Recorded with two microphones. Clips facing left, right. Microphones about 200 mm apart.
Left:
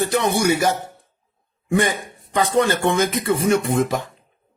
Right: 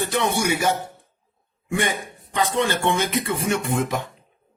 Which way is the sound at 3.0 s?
40° left (ahead or behind).